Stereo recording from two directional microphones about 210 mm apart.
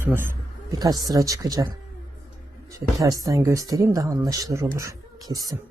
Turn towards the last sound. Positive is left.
turn(degrees=-15)  # may be behind; listen again after turning